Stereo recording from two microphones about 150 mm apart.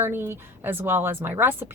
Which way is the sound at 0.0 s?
15° right (ahead or behind).